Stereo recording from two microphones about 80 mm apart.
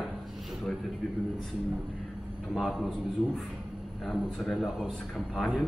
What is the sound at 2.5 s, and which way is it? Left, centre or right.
Speech, centre.